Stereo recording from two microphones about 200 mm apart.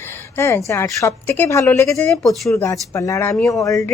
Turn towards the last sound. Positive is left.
turn(degrees=15)  # may be behind; listen again after turning